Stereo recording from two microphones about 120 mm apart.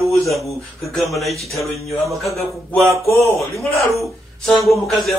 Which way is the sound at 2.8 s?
25° right (ahead or behind).